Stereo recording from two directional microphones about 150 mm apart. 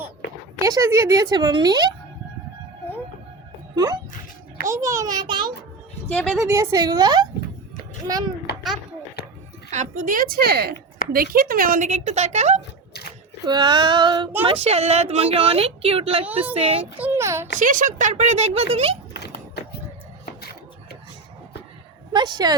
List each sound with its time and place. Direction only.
0.6 s speech: 20° right (ahead or behind)
4.7 s speech: 20° right (ahead or behind)
6.1 s speech: 5° left (ahead or behind)
6.4 s speech: 20° right (ahead or behind)
9.7 s speech: 55° right (ahead or behind); by 10.8 s 90° right
11.1 s speech: 75° right (ahead or behind)
11.9 s speech: 50° right (ahead or behind)
12.9 s a sound: 90° left
13.4 s a woman's voice: 30° right (ahead or behind)
14.4 s a woman's voice: 40° right (ahead or behind)
17.0 s a child's voice: 15° right (ahead or behind)
17.6 s speech: 60° right (ahead or behind); by 18.9 s 40° right (ahead or behind)
19.2 s horse: 90° left
22.1 s speech: 30° right (ahead or behind)